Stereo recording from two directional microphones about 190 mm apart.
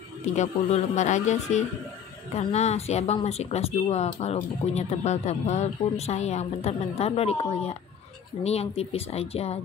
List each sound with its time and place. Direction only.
0.4 s speech: 35° left (ahead or behind)